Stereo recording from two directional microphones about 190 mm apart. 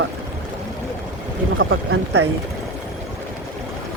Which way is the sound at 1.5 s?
85° right.